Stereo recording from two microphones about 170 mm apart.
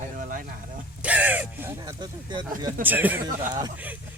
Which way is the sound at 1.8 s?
25° right (ahead or behind).